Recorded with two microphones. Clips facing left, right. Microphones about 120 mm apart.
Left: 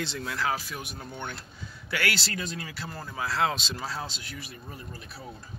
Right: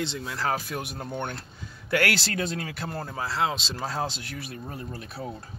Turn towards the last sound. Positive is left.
turn(degrees=-60)  # may be behind; listen again after turning